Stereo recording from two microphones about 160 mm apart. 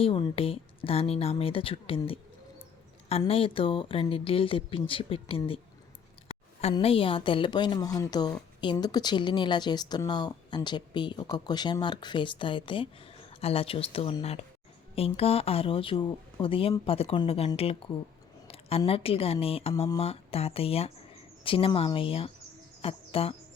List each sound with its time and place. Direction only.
0.0 s speech: 35° left (ahead or behind)
3.1 s speech: 40° left (ahead or behind)
6.2 s a sound: 40° left (ahead or behind)
6.7 s speech: 35° left (ahead or behind)
18.4 s a sound: 35° left (ahead or behind)
18.9 s speech: 35° left (ahead or behind)